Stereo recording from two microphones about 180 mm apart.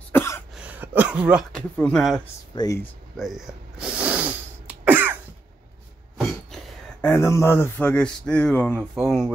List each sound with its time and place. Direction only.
0.1 s cough: 15° left (ahead or behind)
0.6 s a sound: 10° right (ahead or behind)
1.8 s speech: 5° left (ahead or behind)
2.5 s speech: 20° left (ahead or behind)
2.8 s snort: centre (ahead or behind)
6.1 s a sound: centre (ahead or behind)
7.1 s speech: 15° left (ahead or behind)